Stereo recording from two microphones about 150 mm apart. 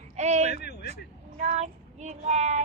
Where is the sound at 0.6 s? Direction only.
90° left.